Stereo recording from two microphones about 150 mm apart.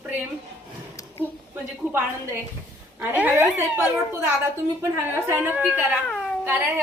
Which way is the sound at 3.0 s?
10° right (ahead or behind).